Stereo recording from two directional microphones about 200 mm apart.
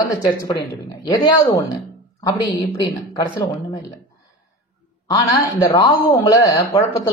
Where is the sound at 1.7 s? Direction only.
20° left (ahead or behind).